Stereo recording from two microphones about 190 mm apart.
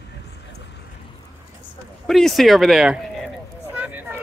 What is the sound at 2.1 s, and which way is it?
Speech, centre (ahead or behind).